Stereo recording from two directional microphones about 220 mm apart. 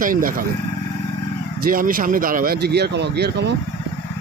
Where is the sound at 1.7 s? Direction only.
40° right (ahead or behind).